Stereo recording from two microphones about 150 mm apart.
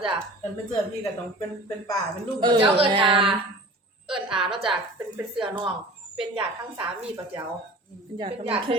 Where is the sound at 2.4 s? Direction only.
35° right (ahead or behind).